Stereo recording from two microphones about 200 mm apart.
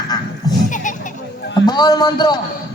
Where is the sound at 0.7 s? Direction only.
40° left (ahead or behind).